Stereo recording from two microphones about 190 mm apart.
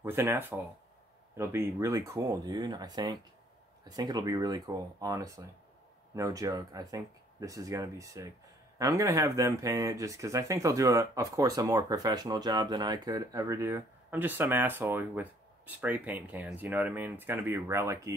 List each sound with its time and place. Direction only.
0.0 s speech: 10° right (ahead or behind)